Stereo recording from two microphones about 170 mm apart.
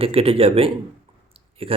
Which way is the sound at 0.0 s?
35° right (ahead or behind).